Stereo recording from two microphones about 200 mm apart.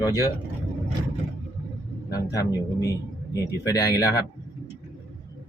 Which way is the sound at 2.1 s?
15° left (ahead or behind).